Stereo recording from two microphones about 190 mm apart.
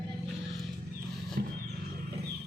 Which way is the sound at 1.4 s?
55° right (ahead or behind).